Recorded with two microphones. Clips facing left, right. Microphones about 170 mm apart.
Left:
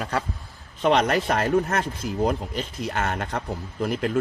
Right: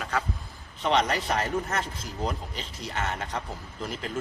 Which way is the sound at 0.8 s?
55° left (ahead or behind).